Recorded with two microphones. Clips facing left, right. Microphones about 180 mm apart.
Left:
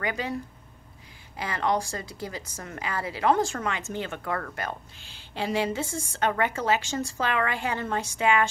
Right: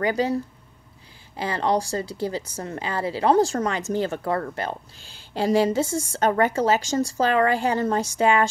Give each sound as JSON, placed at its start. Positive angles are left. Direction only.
{"t": 0.0, "sound": "speech", "side_deg": -35}